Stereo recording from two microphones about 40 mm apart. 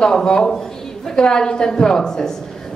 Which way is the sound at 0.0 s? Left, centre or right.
Centre.